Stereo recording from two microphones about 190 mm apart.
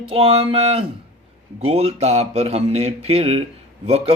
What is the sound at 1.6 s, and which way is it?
Speech, 30° right (ahead or behind).